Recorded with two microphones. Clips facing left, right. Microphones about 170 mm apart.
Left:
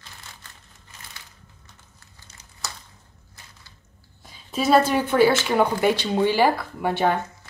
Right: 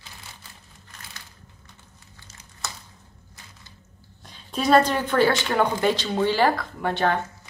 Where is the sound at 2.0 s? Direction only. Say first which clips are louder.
Right 2 dB; 5° right (ahead or behind).